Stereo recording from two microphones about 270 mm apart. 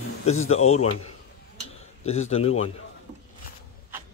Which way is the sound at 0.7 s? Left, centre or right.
Left.